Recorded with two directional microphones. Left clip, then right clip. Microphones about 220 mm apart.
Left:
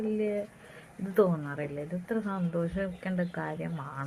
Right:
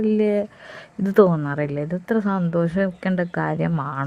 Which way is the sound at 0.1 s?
55° right (ahead or behind).